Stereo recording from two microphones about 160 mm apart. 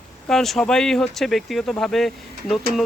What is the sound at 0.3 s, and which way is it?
Speech, centre (ahead or behind).